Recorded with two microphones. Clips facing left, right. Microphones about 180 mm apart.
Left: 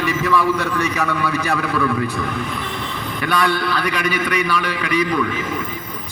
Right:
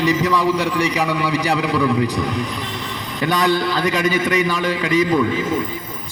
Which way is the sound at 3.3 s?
20° right (ahead or behind).